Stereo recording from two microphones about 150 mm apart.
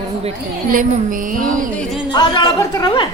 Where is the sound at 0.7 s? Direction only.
65° right (ahead or behind).